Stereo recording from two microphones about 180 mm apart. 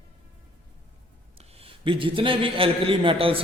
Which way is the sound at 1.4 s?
30° right (ahead or behind).